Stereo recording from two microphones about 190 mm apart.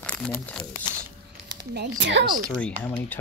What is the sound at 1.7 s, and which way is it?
Speech, 65° right (ahead or behind).